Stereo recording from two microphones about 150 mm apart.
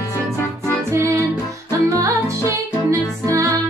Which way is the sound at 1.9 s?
20° right (ahead or behind).